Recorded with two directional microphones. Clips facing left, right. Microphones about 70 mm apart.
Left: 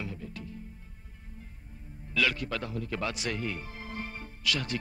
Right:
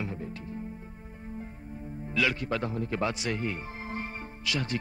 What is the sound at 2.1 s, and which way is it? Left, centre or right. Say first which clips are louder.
Music: right 1 dB; right.